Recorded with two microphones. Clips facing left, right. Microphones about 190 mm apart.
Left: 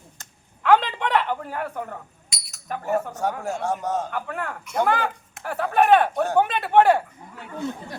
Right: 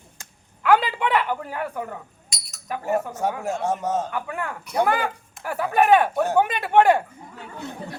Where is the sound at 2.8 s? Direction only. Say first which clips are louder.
Right 1 dB; 15° right (ahead or behind).